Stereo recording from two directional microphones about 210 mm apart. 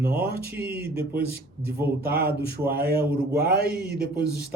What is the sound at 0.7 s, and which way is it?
Speech, 45° right (ahead or behind).